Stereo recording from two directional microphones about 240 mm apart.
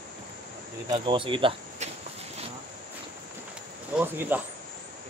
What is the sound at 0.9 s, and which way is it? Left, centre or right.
Speech, centre.